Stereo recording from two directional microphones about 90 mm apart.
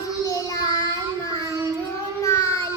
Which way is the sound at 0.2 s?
40° left (ahead or behind).